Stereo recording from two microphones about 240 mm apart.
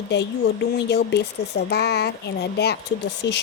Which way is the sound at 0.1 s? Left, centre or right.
Left.